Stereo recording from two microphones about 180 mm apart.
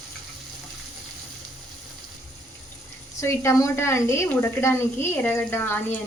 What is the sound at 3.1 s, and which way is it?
A woman's voice, 15° left (ahead or behind).